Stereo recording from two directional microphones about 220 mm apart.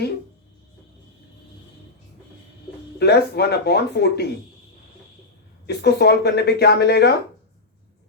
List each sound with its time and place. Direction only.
3.0 s speech: 50° left (ahead or behind)
5.6 s speech: 50° left (ahead or behind)